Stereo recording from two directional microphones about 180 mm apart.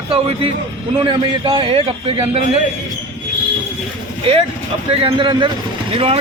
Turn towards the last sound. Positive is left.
turn(degrees=-30)  # may be behind; listen again after turning